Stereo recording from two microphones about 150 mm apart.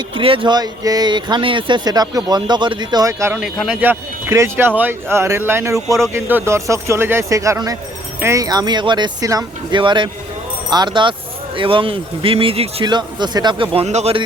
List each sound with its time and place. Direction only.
0.1 s speech: 35° right (ahead or behind); by 3.3 s 20° right (ahead or behind)
3.3 s speech: centre (ahead or behind); by 13.8 s 35° right (ahead or behind)
13.8 s speech: 45° right (ahead or behind)